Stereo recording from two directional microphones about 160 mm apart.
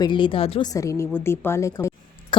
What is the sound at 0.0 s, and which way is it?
Speech, 30° left (ahead or behind).